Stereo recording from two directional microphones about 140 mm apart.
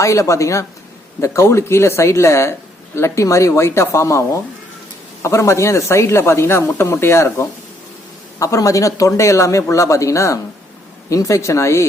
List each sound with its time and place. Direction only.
0.0 s speech: 20° left (ahead or behind)
5.2 s speech: 20° left (ahead or behind)